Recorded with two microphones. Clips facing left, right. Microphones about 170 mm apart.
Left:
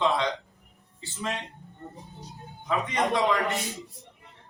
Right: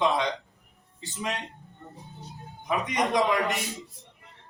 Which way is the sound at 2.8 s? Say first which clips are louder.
Even; 20° right (ahead or behind).